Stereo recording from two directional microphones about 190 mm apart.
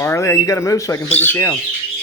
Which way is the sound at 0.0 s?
15° left (ahead or behind).